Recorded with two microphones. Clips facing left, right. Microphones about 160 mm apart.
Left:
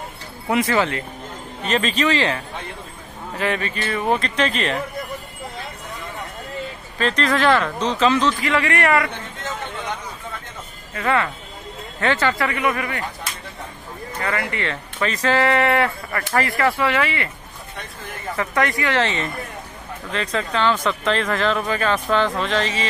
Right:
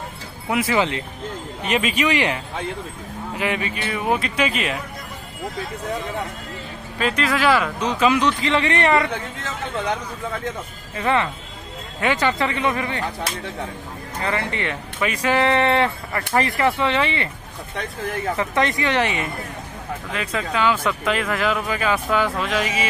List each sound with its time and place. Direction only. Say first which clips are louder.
0.5 s speech: left 2 dB; 5° right (ahead or behind)
0.7 s speech: even; 20° right (ahead or behind)
7.0 s speech: left 1 dB; 10° right (ahead or behind)
11.0 s speech: even; 20° right (ahead or behind)
14.2 s speech: even; 20° right (ahead or behind)
18.3 s speech: left 1 dB; 20° right (ahead or behind)